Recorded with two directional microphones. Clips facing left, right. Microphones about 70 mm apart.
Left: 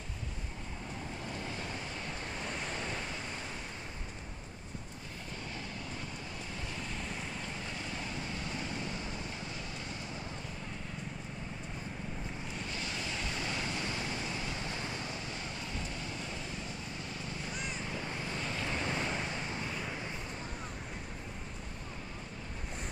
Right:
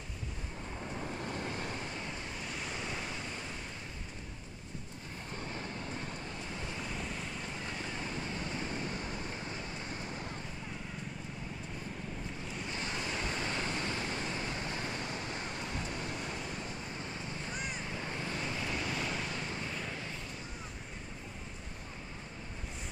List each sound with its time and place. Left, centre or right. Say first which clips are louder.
1.2 s vehicle: right 2 dB; right
8.4 s vehicle: right 1 dB; right
12.7 s vehicle: right 3 dB; right
17.4 s vehicle: right 1 dB; right
18.6 s waves: left 4 dB; left; by 20.0 s centre